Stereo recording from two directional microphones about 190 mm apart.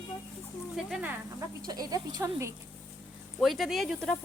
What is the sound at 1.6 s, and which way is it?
Speech, 20° right (ahead or behind).